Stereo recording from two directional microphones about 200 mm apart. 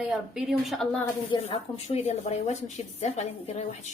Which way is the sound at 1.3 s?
30° left (ahead or behind).